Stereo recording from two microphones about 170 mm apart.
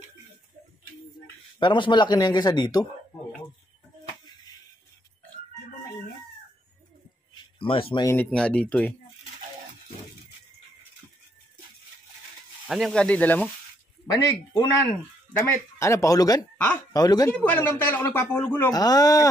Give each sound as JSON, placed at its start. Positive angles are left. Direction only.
{"t": 1.6, "sound": "a man's voice", "side_deg": 25}
{"t": 4.3, "sound": "a sound", "side_deg": 25}
{"t": 7.5, "sound": "speech", "side_deg": 30}
{"t": 8.1, "sound": "speech", "side_deg": 10}
{"t": 12.6, "sound": "speech", "side_deg": 0}
{"t": 14.1, "sound": "a man's voice", "side_deg": 20}
{"t": 15.8, "sound": "a man's voice", "side_deg": 20}
{"t": 17.3, "sound": "speech", "side_deg": 10}